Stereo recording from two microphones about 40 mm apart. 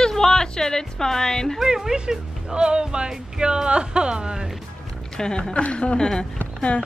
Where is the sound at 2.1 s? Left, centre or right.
Centre.